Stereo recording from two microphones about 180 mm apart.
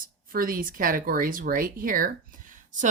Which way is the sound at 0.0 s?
50° right (ahead or behind).